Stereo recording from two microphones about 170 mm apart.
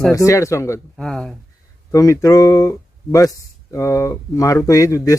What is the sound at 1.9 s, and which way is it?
Speech, 20° left (ahead or behind).